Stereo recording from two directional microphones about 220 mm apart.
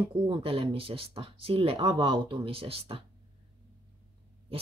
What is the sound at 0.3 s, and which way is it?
Speech, 25° right (ahead or behind).